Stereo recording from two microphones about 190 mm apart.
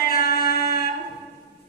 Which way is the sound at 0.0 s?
50° left (ahead or behind).